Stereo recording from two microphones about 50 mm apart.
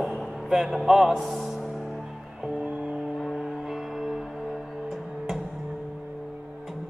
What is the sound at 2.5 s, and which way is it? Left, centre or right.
Music, centre.